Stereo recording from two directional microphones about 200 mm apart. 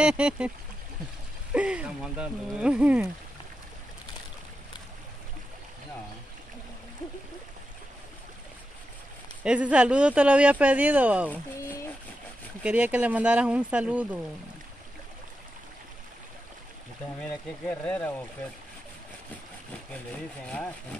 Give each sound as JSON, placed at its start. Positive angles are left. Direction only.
{"t": 0.0, "sound": "speech", "side_deg": -5}
{"t": 1.5, "sound": "speech", "side_deg": -5}
{"t": 9.4, "sound": "speech", "side_deg": -5}
{"t": 12.6, "sound": "speech", "side_deg": -5}
{"t": 17.2, "sound": "speech", "side_deg": 5}
{"t": 20.4, "sound": "speech", "side_deg": 5}